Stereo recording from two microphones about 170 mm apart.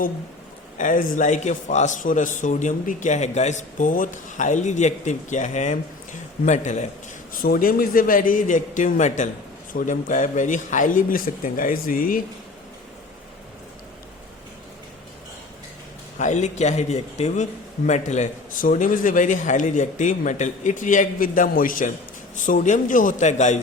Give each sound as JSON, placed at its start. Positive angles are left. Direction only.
{"t": 0.8, "sound": "a man's voice", "side_deg": 50}
{"t": 7.3, "sound": "a man's voice", "side_deg": 60}
{"t": 16.1, "sound": "a man's voice", "side_deg": 45}